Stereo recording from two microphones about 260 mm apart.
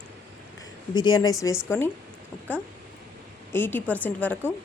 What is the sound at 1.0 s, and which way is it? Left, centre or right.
Speech, centre.